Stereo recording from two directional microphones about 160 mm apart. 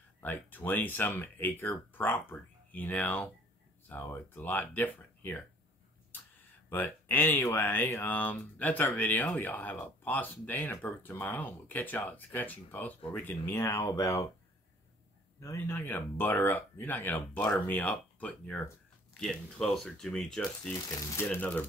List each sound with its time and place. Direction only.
0.2 s speech: 10° left (ahead or behind)
6.7 s speech: 10° left (ahead or behind)
15.4 s speech: 15° left (ahead or behind)
20.9 s speech: 15° left (ahead or behind)